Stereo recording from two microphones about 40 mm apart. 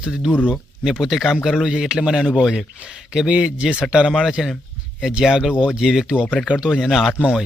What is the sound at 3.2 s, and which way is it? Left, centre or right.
Speech, right.